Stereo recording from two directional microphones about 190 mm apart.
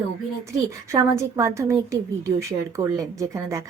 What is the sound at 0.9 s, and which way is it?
A woman's voice, 15° right (ahead or behind).